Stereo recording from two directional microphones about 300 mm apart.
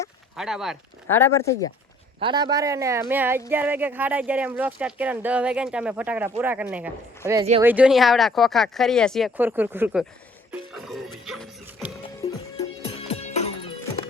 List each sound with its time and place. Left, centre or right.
0.3 s speech: centre
2.2 s speech: centre
10.5 s music: centre
12.0 s music: centre